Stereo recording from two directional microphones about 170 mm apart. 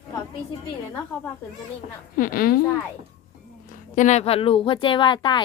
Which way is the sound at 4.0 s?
40° left (ahead or behind).